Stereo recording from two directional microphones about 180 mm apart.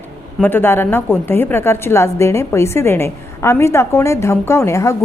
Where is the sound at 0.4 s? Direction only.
10° left (ahead or behind).